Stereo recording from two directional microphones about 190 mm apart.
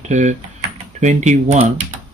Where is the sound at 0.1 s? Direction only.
40° right (ahead or behind).